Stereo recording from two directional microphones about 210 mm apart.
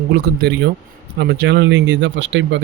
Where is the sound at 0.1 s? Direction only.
50° right (ahead or behind).